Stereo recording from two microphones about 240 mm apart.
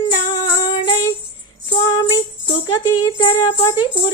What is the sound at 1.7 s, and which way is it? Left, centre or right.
Jingle bell, centre.